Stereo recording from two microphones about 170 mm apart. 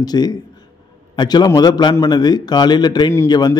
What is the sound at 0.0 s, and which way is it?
A man's voice, 25° left (ahead or behind).